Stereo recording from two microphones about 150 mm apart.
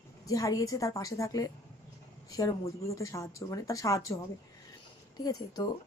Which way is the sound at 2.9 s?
20° left (ahead or behind).